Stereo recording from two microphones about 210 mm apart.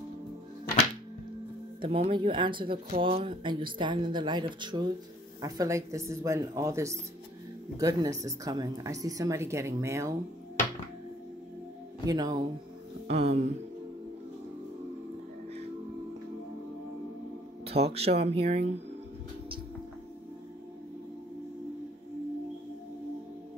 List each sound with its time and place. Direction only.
1.8 s speech: 25° right (ahead or behind)
12.1 s speech: 20° right (ahead or behind)
13.1 s speech: 30° right (ahead or behind)
17.6 s speech: 30° right (ahead or behind)